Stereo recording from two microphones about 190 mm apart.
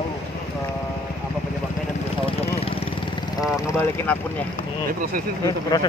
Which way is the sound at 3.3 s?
15° left (ahead or behind).